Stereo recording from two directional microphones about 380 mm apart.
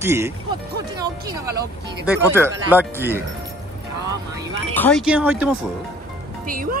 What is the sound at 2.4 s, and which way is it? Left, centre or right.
Music, centre.